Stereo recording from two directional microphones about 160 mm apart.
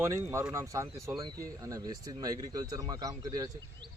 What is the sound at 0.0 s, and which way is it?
Speech, 15° right (ahead or behind).